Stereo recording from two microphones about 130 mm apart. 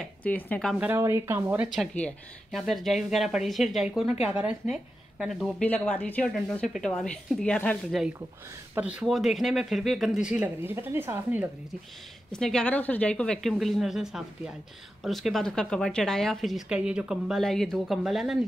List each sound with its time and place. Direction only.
0.0 s speech: 10° left (ahead or behind)
0.7 s a woman's voice: 15° right (ahead or behind)
2.0 s a woman's voice: 10° left (ahead or behind)
5.6 s speech: 10° left (ahead or behind)
8.7 s speech: 10° right (ahead or behind)
12.3 s speech: 5° left (ahead or behind)